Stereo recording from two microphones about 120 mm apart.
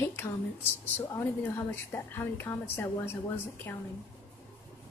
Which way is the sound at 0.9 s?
20° left (ahead or behind).